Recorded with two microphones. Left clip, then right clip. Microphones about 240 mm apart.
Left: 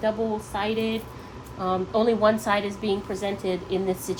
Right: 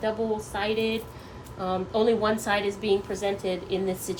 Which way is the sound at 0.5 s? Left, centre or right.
Left.